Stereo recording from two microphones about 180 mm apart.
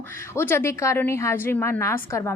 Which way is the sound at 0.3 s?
15° left (ahead or behind).